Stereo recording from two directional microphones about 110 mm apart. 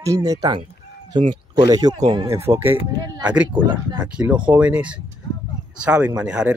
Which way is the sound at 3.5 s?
45° right (ahead or behind).